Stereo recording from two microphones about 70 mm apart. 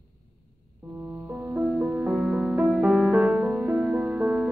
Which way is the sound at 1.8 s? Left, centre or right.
Centre.